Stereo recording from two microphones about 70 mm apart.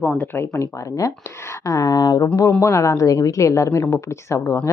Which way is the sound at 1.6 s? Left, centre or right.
Left.